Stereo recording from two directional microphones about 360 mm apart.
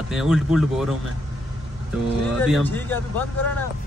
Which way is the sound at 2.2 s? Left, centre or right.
Centre.